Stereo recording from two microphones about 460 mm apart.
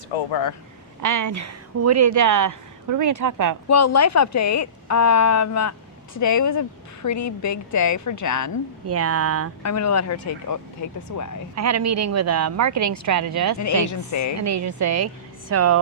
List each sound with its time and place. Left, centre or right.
0.3 s speech: left
1.0 s a woman's voice: right
3.7 s a woman's voice: left
8.9 s a woman's voice: right
9.6 s a woman's voice: left
11.1 s speech: left
11.5 s a woman's voice: right
13.8 s a woman's voice: left
14.3 s a woman's voice: right